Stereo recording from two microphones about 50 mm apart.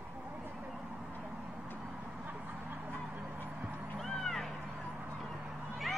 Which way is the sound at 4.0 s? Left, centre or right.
Centre.